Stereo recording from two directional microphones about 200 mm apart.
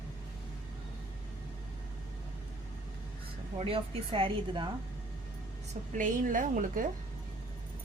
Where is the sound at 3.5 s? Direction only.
30° right (ahead or behind).